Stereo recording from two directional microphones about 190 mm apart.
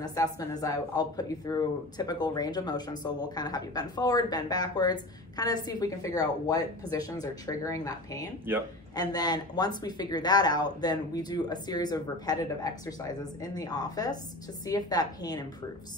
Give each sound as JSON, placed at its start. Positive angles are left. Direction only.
{"t": 0.0, "sound": "speech", "side_deg": 20}